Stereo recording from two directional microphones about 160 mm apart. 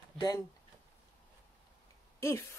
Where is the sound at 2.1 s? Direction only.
15° left (ahead or behind).